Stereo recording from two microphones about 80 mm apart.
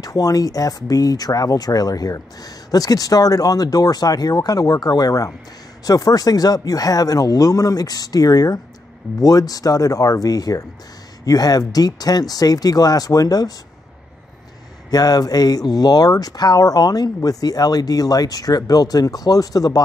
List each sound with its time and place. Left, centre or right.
0.0 s speech: left
14.9 s speech: left